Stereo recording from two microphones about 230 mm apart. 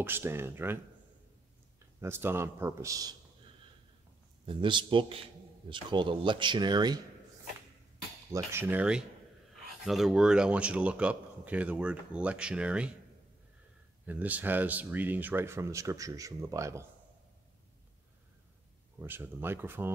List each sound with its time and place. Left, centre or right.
0.0 s speech: centre
2.0 s speech: centre
4.5 s speech: right
8.3 s speech: centre
14.0 s speech: centre
18.9 s speech: centre